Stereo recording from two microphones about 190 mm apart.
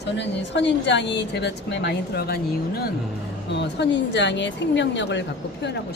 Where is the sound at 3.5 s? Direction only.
65° left (ahead or behind).